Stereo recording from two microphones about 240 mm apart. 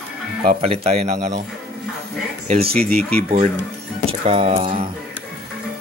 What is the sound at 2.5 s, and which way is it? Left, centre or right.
Speech, right.